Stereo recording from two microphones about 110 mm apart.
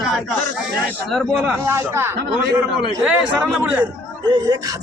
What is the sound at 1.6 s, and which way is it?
Speech, 25° right (ahead or behind).